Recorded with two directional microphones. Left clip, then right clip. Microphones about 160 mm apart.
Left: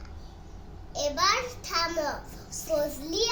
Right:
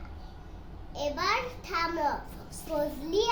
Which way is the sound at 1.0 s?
20° right (ahead or behind).